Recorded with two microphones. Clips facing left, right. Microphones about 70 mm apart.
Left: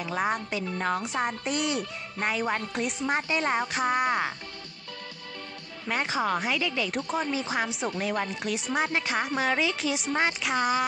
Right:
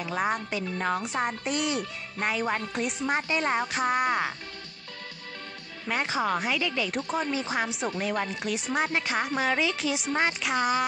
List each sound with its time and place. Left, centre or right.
0.0 s speech: centre
5.9 s speech: centre